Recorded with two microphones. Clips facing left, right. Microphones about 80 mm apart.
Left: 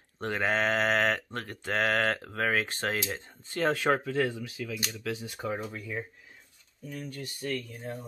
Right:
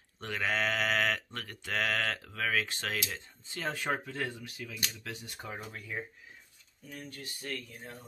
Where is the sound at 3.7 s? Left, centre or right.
Left.